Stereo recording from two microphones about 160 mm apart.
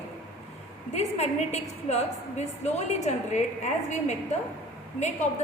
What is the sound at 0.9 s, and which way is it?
A woman's voice, 45° left (ahead or behind).